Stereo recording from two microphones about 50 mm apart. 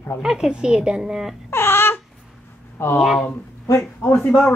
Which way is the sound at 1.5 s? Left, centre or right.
Left.